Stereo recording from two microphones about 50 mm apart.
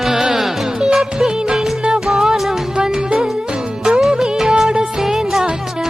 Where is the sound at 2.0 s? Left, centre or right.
Centre.